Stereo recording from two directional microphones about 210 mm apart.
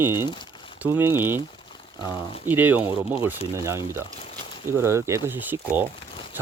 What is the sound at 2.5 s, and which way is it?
Speech, 10° right (ahead or behind).